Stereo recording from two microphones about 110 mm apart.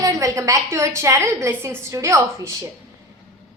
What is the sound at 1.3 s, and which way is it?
Speech, 25° right (ahead or behind).